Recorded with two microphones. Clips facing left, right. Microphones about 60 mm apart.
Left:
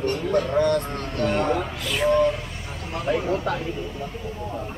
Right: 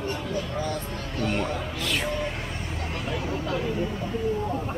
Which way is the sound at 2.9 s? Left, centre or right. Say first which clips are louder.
Left 8 dB; left.